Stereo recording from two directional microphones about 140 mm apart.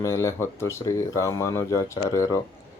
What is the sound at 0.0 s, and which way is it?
Speech, 20° left (ahead or behind).